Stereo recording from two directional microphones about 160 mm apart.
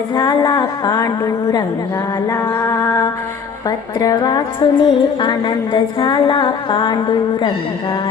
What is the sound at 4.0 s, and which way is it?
Music, 25° left (ahead or behind).